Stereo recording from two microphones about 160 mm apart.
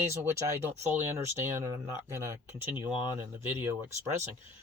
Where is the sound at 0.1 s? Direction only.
15° right (ahead or behind).